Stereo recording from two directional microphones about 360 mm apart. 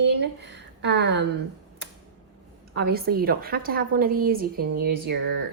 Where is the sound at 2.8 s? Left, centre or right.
Right.